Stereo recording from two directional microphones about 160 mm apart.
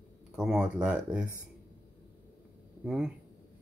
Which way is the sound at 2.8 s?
5° right (ahead or behind).